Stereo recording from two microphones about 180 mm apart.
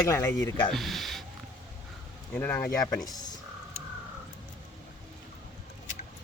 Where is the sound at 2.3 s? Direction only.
15° left (ahead or behind).